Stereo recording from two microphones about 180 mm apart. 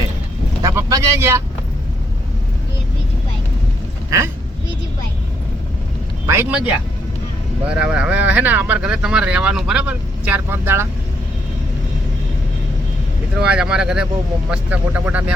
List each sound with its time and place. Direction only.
0.6 s speech: 20° right (ahead or behind)
6.2 s speech: 10° right (ahead or behind)
13.4 s speech: 5° right (ahead or behind)